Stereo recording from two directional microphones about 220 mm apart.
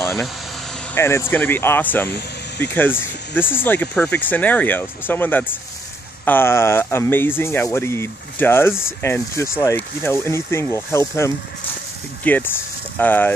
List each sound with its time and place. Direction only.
0.0 s vehicle: centre (ahead or behind)
0.9 s speech: 10° left (ahead or behind)
2.0 s speech: 45° left (ahead or behind)
2.6 s speech: 10° left (ahead or behind)